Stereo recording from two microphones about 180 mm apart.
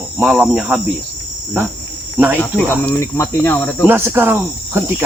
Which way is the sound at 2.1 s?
10° right (ahead or behind).